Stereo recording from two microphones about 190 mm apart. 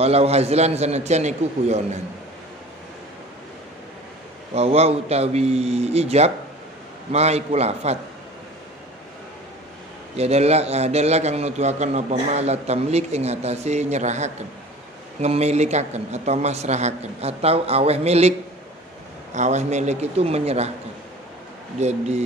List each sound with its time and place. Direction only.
0.0 s a man's voice: 30° right (ahead or behind)
4.6 s a man's voice: 35° right (ahead or behind)
10.1 s a man's voice: 35° right (ahead or behind)
19.3 s a man's voice: 40° right (ahead or behind)
21.7 s a man's voice: 35° right (ahead or behind)